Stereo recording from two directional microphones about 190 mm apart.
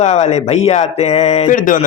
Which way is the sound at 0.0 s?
35° left (ahead or behind).